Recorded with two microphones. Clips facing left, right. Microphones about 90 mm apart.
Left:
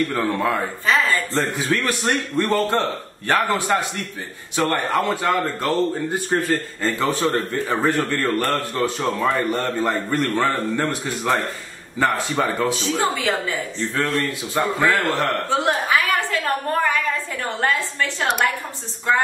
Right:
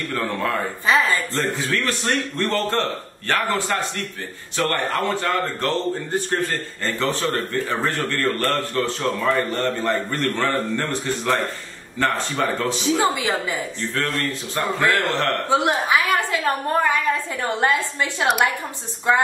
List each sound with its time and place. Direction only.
0.1 s speech: 15° left (ahead or behind)
0.8 s a woman's voice: 15° right (ahead or behind)
1.3 s a man's voice: 20° left (ahead or behind)
12.8 s a woman's voice: 15° right (ahead or behind)
14.5 s speech: 10° left (ahead or behind)
15.5 s a woman's voice: 15° right (ahead or behind)